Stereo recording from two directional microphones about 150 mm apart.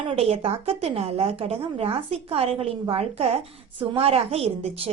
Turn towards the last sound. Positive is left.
turn(degrees=-45)  # may be behind; listen again after turning